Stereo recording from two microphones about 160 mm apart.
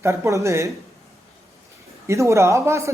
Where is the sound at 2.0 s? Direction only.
20° right (ahead or behind).